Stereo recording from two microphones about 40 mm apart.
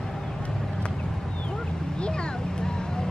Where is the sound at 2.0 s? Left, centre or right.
Left.